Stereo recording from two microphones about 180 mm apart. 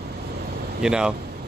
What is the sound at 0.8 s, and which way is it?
Speech, 5° right (ahead or behind).